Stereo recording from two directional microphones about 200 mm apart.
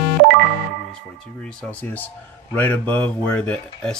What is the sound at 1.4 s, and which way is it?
Speech, 5° left (ahead or behind).